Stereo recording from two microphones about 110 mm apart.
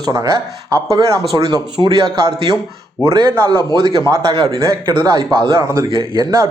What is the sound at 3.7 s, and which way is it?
Speech, 40° right (ahead or behind).